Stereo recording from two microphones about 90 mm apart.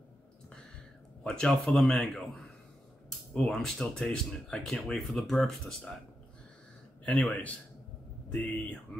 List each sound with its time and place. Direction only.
1.2 s speech: 10° left (ahead or behind)
7.1 s a man's voice: 10° left (ahead or behind)